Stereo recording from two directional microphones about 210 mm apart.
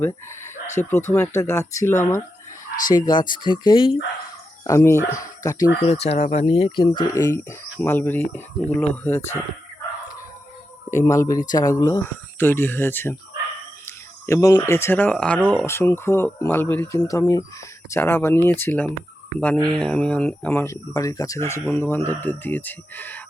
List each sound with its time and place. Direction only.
0.7 s speech: 10° left (ahead or behind)
5.8 s speech: 30° left (ahead or behind); by 9.4 s 10° left (ahead or behind)
10.9 s speech: 15° left (ahead or behind)